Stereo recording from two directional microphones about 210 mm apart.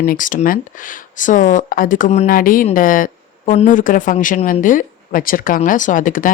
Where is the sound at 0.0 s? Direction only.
40° left (ahead or behind).